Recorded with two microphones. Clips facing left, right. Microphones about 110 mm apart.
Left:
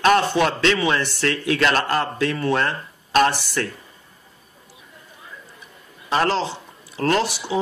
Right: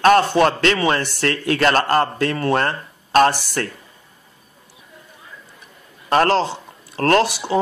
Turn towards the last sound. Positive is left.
turn(degrees=-55)  # may be behind; listen again after turning